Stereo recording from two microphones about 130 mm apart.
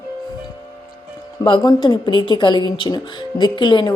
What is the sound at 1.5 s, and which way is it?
Speech, 35° left (ahead or behind).